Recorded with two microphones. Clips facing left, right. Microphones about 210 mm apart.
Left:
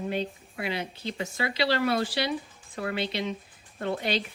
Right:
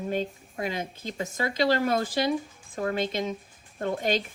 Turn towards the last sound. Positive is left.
turn(degrees=-45)  # may be behind; listen again after turning